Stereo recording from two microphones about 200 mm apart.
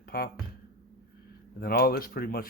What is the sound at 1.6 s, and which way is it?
Speech, 50° left (ahead or behind).